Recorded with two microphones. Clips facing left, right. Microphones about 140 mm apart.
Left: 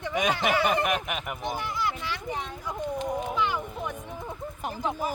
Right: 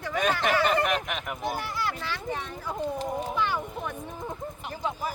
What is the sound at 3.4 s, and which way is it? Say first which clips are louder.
Speech: even; 15° left (ahead or behind).